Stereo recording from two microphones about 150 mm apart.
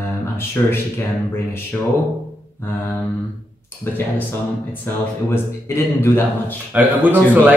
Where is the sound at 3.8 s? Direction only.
15° left (ahead or behind).